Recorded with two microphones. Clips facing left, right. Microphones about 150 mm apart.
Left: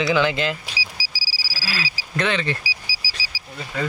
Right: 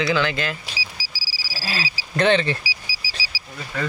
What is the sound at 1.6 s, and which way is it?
Speech, 25° right (ahead or behind).